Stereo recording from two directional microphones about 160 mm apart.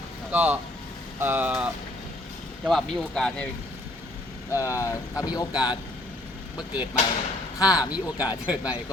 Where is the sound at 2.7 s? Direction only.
Centre (ahead or behind).